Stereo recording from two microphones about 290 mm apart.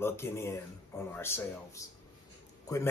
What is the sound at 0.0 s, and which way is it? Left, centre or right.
Speech, centre.